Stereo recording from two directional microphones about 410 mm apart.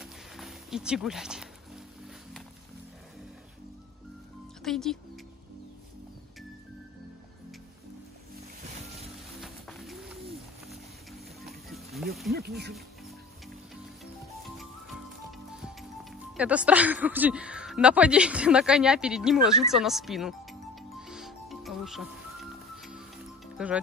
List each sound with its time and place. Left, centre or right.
0.0 s a sound: centre
4.6 s speech: centre
9.4 s music: centre
11.4 s music: centre
12.3 s speech: right
15.3 s speech: centre
21.0 s music: centre